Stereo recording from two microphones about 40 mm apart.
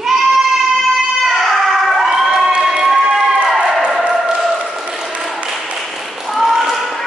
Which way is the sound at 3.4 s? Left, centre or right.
Centre.